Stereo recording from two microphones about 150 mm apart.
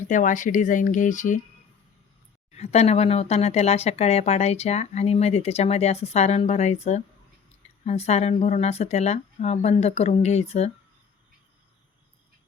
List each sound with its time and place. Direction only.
0.1 s speech: 60° left (ahead or behind)
2.5 s speech: 45° left (ahead or behind)